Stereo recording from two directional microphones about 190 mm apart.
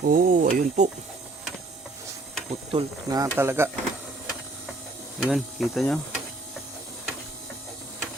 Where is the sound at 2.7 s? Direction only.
20° right (ahead or behind).